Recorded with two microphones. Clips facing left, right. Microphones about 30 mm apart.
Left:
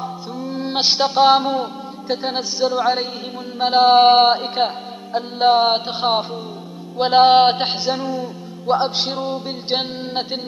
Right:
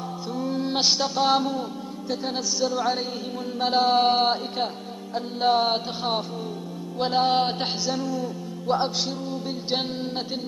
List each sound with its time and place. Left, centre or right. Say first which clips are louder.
0.6 s a man's voice: left 6 dB; left
3.5 s mantra: left 6 dB; left
3.8 s speech: left 10 dB; left
8.9 s a sound: left 6 dB; left
9.7 s speech: left 5 dB; left